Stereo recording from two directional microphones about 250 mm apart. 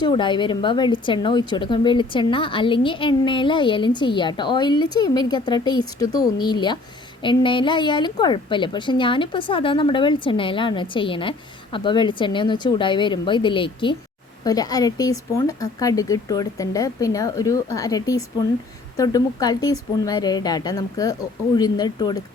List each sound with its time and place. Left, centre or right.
0.0 s a woman's voice: centre